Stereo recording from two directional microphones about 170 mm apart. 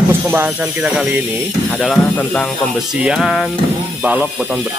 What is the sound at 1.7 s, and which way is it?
Speech, 5° left (ahead or behind).